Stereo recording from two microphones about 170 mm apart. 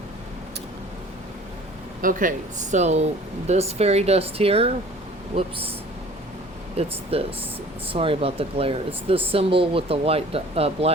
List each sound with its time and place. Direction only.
2.0 s speech: 50° right (ahead or behind); by 4.7 s 35° right (ahead or behind)
6.7 s speech: 35° right (ahead or behind)